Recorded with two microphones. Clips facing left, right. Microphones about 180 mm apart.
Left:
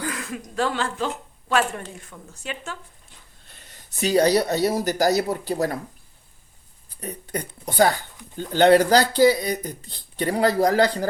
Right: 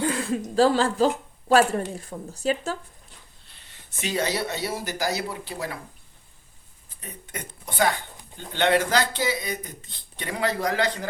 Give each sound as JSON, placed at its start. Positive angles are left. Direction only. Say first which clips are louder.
{"t": 0.0, "sound": "speech", "louder": "right 5 dB", "side_deg": -30}
{"t": 3.4, "sound": "speech", "louder": "left 3 dB", "side_deg": 45}
{"t": 7.0, "sound": "speech", "louder": "left 8 dB", "side_deg": 35}